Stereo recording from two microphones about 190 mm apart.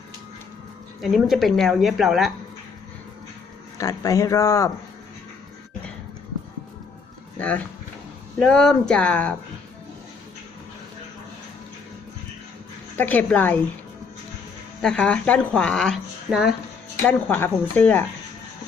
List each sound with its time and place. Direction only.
1.0 s speech: centre (ahead or behind)
3.8 s speech: 20° left (ahead or behind)
7.3 s speech: 5° left (ahead or behind)
13.0 s speech: 10° left (ahead or behind)
14.8 s speech: 5° left (ahead or behind)
17.1 s speech: 10° left (ahead or behind)